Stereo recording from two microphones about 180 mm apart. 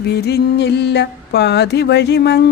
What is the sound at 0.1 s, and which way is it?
Music, 65° left (ahead or behind).